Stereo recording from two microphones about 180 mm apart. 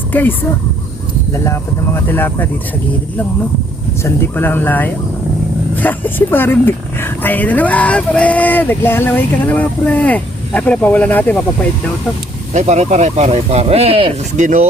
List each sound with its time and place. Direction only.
0.1 s speech: 10° left (ahead or behind)
2.0 s speech: 10° left (ahead or behind)
4.0 s speech: 10° left (ahead or behind)
12.5 s speech: 40° right (ahead or behind)